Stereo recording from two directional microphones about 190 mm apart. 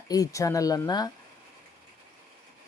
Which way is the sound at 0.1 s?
15° left (ahead or behind).